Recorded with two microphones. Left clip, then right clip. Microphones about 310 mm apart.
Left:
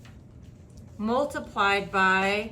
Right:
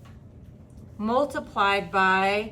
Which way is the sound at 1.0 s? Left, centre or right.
Centre.